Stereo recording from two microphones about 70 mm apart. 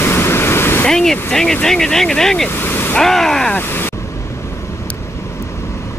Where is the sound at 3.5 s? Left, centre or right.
Left.